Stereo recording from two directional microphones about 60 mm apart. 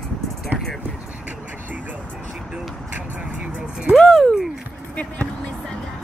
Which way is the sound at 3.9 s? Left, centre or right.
Centre.